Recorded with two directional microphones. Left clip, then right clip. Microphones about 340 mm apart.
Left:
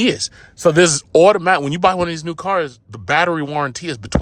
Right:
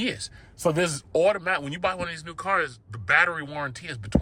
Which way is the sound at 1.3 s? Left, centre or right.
Centre.